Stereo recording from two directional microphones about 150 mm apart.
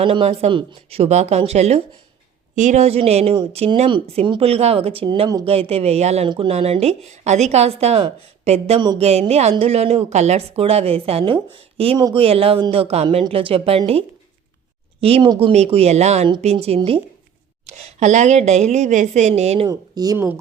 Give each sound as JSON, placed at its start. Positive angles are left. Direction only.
{"t": 0.0, "sound": "a woman's voice", "side_deg": -40}
{"t": 6.2, "sound": "a woman's voice", "side_deg": -30}
{"t": 15.0, "sound": "a woman's voice", "side_deg": -40}
{"t": 19.6, "sound": "speech", "side_deg": -25}